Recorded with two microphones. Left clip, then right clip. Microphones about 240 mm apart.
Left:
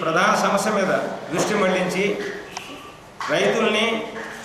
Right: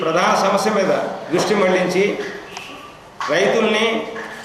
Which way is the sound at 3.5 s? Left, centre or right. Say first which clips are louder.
Right 3 dB; centre.